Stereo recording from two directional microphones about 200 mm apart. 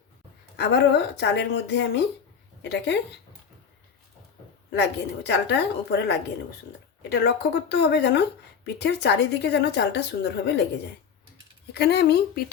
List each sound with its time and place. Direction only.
0.5 s a woman's voice: 55° left (ahead or behind)
4.7 s speech: 60° left (ahead or behind)
11.7 s speech: 55° left (ahead or behind)